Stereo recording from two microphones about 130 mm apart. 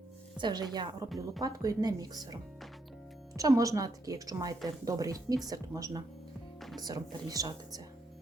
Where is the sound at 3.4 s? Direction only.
25° right (ahead or behind).